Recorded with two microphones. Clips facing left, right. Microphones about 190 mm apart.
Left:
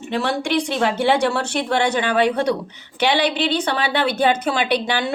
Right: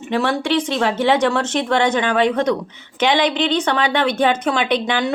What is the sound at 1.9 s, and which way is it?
A woman's voice, 35° left (ahead or behind).